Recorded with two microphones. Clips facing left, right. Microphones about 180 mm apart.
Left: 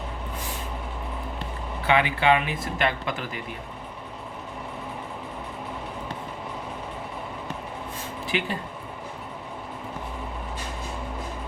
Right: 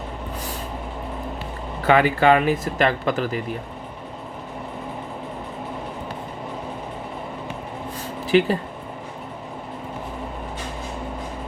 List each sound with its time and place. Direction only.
1.8 s speech: 45° right (ahead or behind)
8.3 s speech: 40° right (ahead or behind)